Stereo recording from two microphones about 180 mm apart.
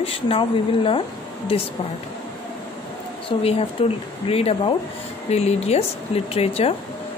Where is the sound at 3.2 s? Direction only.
30° left (ahead or behind).